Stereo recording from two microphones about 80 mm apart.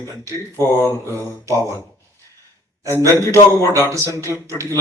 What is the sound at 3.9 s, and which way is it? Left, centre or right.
Speech, right.